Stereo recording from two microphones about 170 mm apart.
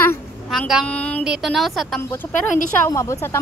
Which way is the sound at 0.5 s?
Centre (ahead or behind).